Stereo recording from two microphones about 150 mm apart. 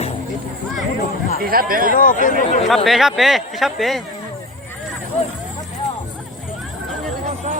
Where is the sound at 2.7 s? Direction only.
Centre (ahead or behind).